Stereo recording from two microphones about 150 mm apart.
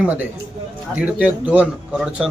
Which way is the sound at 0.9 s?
10° right (ahead or behind).